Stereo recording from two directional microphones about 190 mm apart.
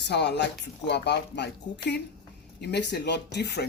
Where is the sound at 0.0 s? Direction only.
65° left (ahead or behind).